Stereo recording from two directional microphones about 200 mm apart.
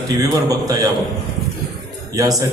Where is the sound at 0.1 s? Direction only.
20° right (ahead or behind).